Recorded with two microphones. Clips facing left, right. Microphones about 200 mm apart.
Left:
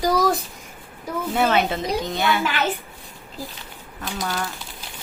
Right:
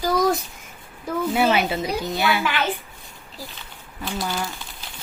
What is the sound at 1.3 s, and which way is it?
A woman's voice, 5° right (ahead or behind).